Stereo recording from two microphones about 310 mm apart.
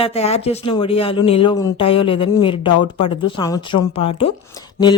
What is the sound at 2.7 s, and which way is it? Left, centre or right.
Speech, left.